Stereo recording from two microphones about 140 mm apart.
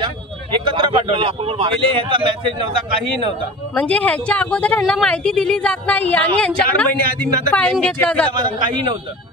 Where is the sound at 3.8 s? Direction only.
10° left (ahead or behind).